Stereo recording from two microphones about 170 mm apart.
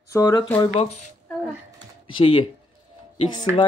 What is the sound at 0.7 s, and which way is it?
Speech, 40° left (ahead or behind).